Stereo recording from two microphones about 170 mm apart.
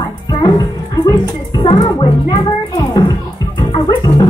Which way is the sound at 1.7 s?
30° left (ahead or behind).